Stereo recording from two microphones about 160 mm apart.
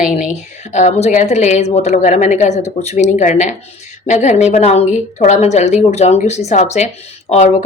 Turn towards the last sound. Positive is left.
turn(degrees=45)  # may be behind; listen again after turning